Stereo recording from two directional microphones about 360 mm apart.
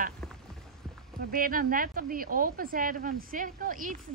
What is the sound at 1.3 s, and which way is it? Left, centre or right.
Speech, right.